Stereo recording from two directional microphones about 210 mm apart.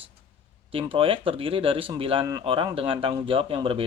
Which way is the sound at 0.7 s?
25° right (ahead or behind).